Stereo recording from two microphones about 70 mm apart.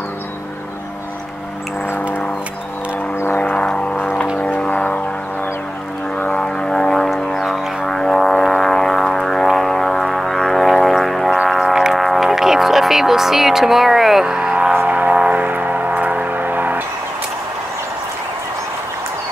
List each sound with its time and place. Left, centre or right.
3.3 s vehicle: centre
6.1 s vehicle: centre
11.4 s music: centre
14.7 s vehicle: right